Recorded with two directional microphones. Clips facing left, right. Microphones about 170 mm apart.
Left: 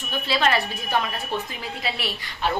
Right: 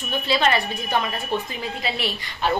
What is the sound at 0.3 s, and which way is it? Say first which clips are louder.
Speech: right 1 dB; centre (ahead or behind).